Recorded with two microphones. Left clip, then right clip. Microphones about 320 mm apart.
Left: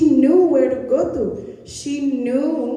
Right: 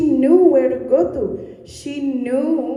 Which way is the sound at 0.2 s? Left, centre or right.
Centre.